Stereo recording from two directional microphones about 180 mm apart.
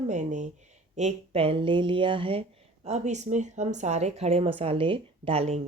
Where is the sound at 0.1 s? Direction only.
40° right (ahead or behind).